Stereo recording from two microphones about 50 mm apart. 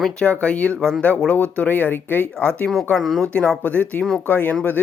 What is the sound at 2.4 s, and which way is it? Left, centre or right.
Speech, left.